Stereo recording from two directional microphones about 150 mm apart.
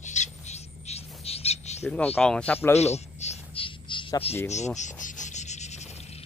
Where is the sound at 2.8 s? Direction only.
45° left (ahead or behind).